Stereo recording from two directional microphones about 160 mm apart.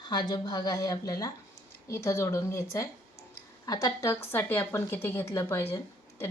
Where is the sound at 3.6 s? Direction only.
20° left (ahead or behind).